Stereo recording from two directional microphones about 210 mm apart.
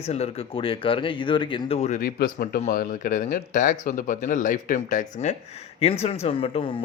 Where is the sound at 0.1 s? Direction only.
30° left (ahead or behind).